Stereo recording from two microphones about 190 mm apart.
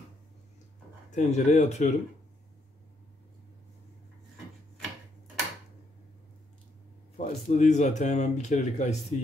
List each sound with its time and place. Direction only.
1.1 s speech: 40° left (ahead or behind)
7.2 s speech: 40° left (ahead or behind)